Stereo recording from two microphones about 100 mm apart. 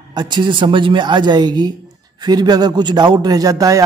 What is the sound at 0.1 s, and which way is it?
A man's voice, 50° right (ahead or behind).